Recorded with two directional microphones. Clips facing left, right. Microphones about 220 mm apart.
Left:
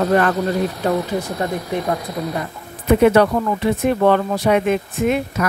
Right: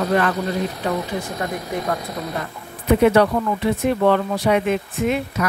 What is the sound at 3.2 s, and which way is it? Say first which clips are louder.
Speech: left 2 dB; 50° left (ahead or behind).